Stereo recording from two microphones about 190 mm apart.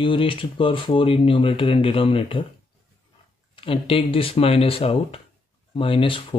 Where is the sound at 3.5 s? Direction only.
30° left (ahead or behind).